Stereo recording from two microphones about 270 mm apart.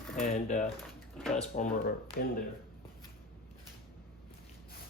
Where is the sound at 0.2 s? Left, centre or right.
Left.